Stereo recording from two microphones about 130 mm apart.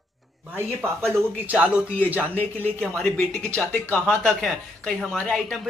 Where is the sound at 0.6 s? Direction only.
15° right (ahead or behind).